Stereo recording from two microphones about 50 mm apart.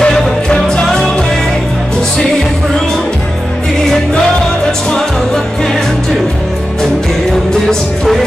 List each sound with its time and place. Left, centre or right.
0.0 s music: centre